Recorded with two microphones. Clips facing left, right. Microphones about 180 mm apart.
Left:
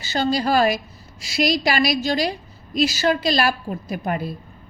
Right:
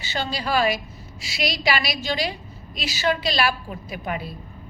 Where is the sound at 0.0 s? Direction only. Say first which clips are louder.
Left 7 dB; 40° left (ahead or behind).